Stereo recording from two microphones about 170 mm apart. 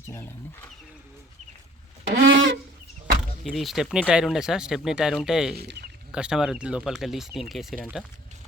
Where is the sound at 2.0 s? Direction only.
90° right.